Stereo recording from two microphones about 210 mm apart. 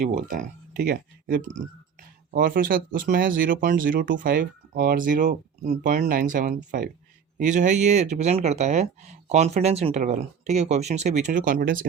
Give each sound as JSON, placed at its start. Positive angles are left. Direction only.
{"t": 0.0, "sound": "speech", "side_deg": -40}